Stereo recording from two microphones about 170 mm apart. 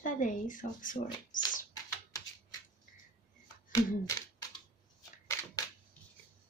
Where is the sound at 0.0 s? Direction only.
50° left (ahead or behind).